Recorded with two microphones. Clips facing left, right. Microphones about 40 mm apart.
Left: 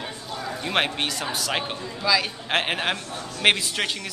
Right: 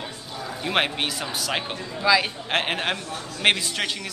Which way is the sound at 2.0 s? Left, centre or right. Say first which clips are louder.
Right 3 dB; centre.